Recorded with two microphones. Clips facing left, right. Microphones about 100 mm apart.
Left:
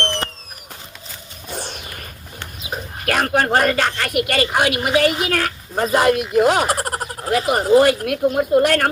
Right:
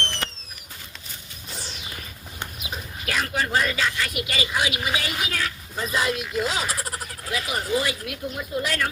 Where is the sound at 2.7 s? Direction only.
55° left (ahead or behind).